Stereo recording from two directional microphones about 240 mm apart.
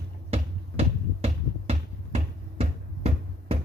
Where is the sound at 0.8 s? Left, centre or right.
Right.